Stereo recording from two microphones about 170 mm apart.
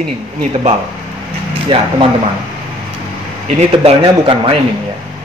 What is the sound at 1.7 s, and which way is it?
Speech, 30° right (ahead or behind).